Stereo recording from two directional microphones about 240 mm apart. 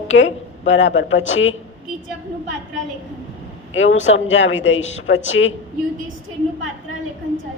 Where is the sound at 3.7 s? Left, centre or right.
Left.